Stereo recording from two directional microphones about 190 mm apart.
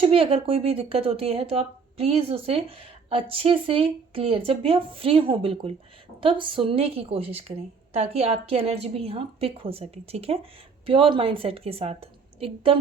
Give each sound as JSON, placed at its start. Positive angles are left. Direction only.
{"t": 0.0, "sound": "a woman's voice", "side_deg": -30}